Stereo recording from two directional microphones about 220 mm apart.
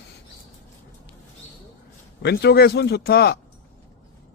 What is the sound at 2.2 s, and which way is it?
A man's voice, 50° left (ahead or behind).